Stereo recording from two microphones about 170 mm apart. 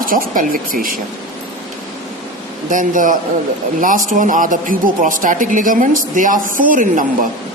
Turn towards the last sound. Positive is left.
turn(degrees=-50)  # may be behind; listen again after turning